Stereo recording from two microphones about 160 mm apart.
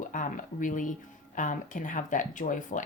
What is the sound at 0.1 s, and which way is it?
Speech, 55° left (ahead or behind).